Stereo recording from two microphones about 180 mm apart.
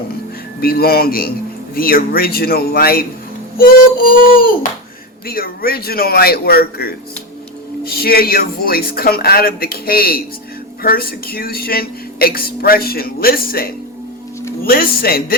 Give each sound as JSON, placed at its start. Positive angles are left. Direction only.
{"t": 0.6, "sound": "speech", "side_deg": 60}
{"t": 3.6, "sound": "music", "side_deg": 50}
{"t": 5.2, "sound": "speech", "side_deg": 55}